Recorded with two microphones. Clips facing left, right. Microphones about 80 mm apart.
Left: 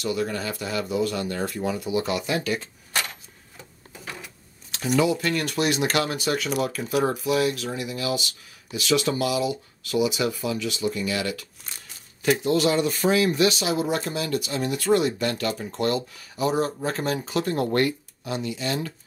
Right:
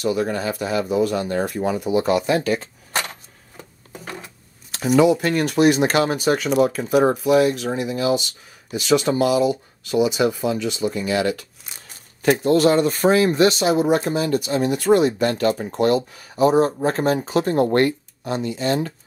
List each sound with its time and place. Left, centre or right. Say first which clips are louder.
0.0 s speech: right 5 dB; right
4.0 s sewing machine: right 3 dB; right
4.9 s speech: right 6 dB; right
11.7 s crumpling: even; centre
12.2 s speech: right 5 dB; right